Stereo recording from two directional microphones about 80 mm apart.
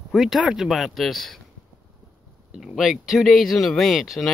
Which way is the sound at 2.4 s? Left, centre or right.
Centre.